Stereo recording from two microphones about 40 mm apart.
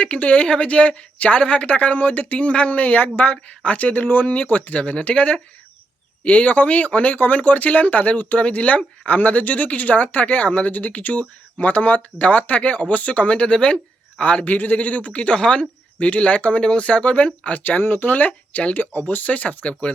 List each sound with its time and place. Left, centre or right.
0.0 s speech: left
4.0 s speech: left
4.8 s speech: left
15.4 s speech: left
16.0 s speech: left
19.0 s speech: left